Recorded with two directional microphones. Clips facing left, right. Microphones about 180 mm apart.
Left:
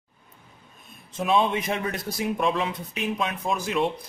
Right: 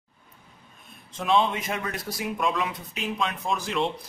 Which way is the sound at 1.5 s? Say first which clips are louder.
Left 3 dB; 25° left (ahead or behind).